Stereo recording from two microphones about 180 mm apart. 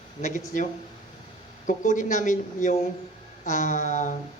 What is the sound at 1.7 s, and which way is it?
Speech, 45° left (ahead or behind).